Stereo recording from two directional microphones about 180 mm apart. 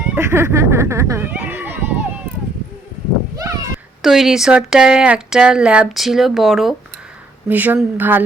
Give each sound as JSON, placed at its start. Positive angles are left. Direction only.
{"t": 0.1, "sound": "speech", "side_deg": -15}
{"t": 3.4, "sound": "a sound", "side_deg": -20}
{"t": 4.0, "sound": "speech", "side_deg": 0}